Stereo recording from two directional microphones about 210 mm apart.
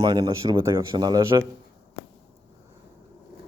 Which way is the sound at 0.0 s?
20° right (ahead or behind).